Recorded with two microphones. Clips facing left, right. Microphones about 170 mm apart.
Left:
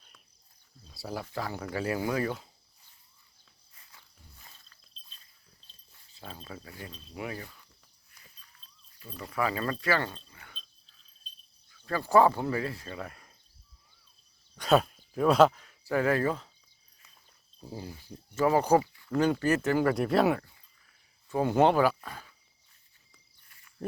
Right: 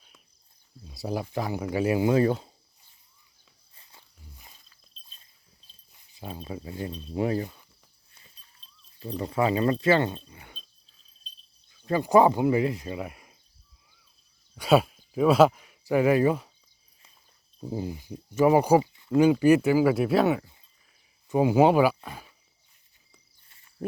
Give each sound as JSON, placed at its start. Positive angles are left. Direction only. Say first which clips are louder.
{"t": 0.9, "sound": "speech", "louder": "right 6 dB", "side_deg": -15}
{"t": 4.4, "sound": "a sound", "louder": "right 2 dB", "side_deg": -15}
{"t": 5.9, "sound": "speech", "louder": "right 6 dB", "side_deg": -15}
{"t": 7.4, "sound": "cricket", "louder": "right 9 dB", "side_deg": -20}
{"t": 8.1, "sound": "livestock", "louder": "left 1 dB", "side_deg": -25}
{"t": 9.1, "sound": "speech", "louder": "right 6 dB", "side_deg": -25}
{"t": 11.7, "sound": "speech", "louder": "right 4 dB", "side_deg": -20}
{"t": 14.5, "sound": "speech", "louder": "right 3 dB", "side_deg": -10}
{"t": 17.6, "sound": "speech", "louder": "right 9 dB", "side_deg": -20}
{"t": 21.2, "sound": "speech", "louder": "right 4 dB", "side_deg": -10}
{"t": 23.5, "sound": "a sound", "louder": "even", "side_deg": -25}